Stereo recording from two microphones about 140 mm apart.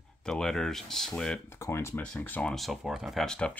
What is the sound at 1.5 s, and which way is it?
Speech, 20° left (ahead or behind).